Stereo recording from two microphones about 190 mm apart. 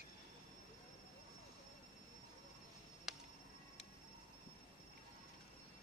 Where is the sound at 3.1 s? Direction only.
Centre (ahead or behind).